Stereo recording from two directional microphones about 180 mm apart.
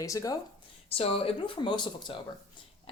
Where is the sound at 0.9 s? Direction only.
30° left (ahead or behind).